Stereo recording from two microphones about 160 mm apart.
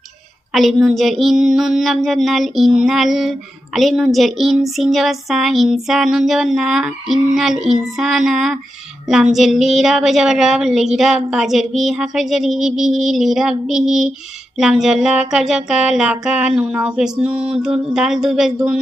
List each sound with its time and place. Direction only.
0.5 s a woman's voice: centre (ahead or behind)